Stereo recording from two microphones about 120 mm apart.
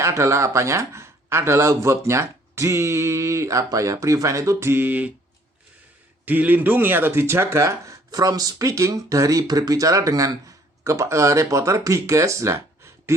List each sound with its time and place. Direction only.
0.0 s speech: 25° right (ahead or behind)
6.2 s speech: 15° right (ahead or behind)